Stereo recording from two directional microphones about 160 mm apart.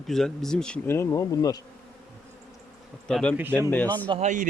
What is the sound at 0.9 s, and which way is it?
Speech, 20° left (ahead or behind).